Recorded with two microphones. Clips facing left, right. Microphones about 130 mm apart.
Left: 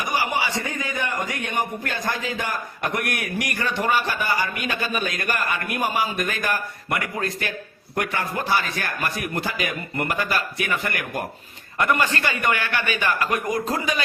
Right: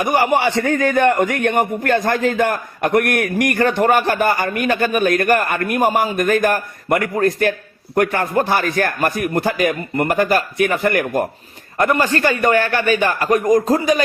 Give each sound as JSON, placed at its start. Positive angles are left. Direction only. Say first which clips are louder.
{"t": 0.0, "sound": "a man's voice", "louder": "right 9 dB", "side_deg": -55}